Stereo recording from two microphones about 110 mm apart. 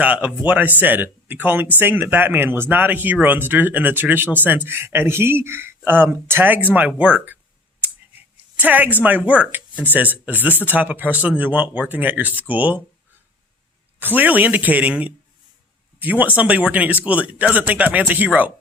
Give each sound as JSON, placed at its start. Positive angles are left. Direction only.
{"t": 0.0, "sound": "speech", "side_deg": -15}
{"t": 8.5, "sound": "speech", "side_deg": -15}
{"t": 14.0, "sound": "speech", "side_deg": -15}